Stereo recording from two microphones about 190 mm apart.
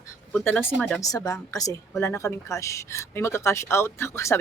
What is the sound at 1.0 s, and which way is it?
Speech, 20° left (ahead or behind).